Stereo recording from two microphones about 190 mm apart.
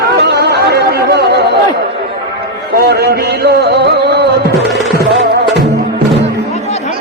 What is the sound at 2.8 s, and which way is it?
A man's voice, 55° right (ahead or behind).